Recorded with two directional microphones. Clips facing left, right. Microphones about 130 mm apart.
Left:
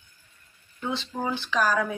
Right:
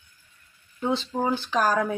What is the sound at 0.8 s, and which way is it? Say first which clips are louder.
Speech: right 5 dB; 35° right (ahead or behind).